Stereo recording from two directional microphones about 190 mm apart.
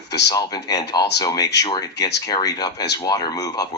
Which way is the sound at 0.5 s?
20° left (ahead or behind).